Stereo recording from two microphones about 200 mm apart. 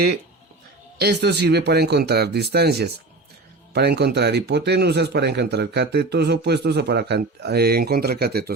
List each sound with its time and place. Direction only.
0.9 s speech: 55° right (ahead or behind)